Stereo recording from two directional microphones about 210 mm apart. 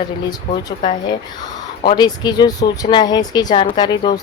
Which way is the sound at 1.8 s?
20° left (ahead or behind).